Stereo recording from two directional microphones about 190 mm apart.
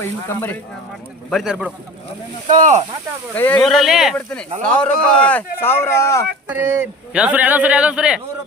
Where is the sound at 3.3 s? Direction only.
10° left (ahead or behind).